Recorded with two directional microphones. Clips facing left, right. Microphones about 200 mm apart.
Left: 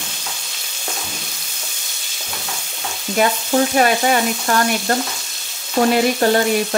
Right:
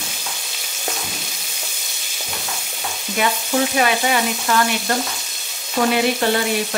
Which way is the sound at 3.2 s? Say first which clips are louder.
Left 3 dB; 40° left (ahead or behind).